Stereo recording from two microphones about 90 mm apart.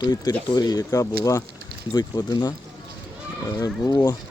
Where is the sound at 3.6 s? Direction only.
40° left (ahead or behind).